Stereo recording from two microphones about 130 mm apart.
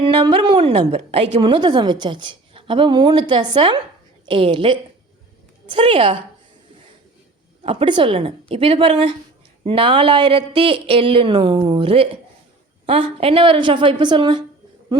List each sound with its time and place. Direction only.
0.1 s a woman's voice: 40° right (ahead or behind)
7.6 s a woman's voice: 45° right (ahead or behind)